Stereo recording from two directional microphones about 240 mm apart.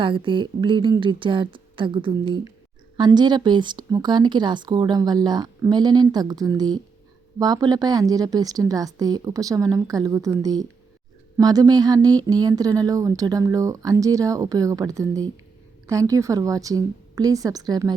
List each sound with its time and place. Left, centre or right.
0.0 s a woman's voice: right